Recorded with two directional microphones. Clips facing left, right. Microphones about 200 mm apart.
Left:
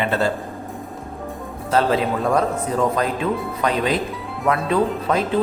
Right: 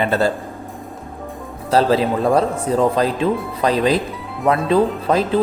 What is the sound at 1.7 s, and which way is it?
A man's voice, 35° right (ahead or behind).